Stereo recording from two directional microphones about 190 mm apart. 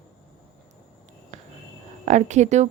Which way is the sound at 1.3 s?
40° right (ahead or behind).